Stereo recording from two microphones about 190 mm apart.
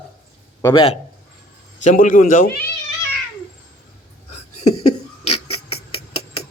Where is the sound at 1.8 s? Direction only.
45° left (ahead or behind).